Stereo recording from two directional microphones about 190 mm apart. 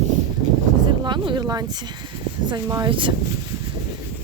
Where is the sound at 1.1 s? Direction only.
25° right (ahead or behind).